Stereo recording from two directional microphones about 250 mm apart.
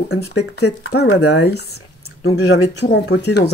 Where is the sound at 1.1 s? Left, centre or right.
Left.